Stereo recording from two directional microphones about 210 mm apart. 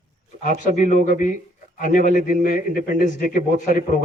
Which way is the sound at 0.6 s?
35° left (ahead or behind).